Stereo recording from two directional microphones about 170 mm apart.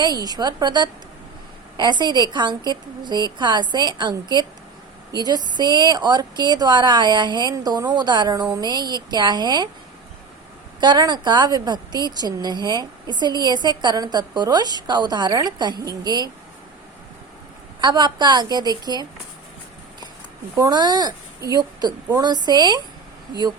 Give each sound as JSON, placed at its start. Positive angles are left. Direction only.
{"t": 0.0, "sound": "speech", "side_deg": -25}
{"t": 10.8, "sound": "speech", "side_deg": -25}
{"t": 17.7, "sound": "speech", "side_deg": -25}
{"t": 20.6, "sound": "speech", "side_deg": -25}